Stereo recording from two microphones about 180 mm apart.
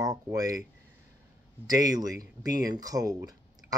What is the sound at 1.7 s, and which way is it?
Speech, 20° right (ahead or behind).